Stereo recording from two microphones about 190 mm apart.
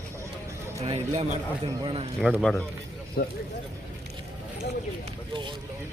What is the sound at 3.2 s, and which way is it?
Speech, 55° left (ahead or behind).